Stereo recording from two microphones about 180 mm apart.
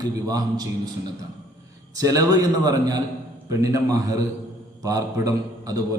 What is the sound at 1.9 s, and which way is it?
A man's voice, 20° right (ahead or behind).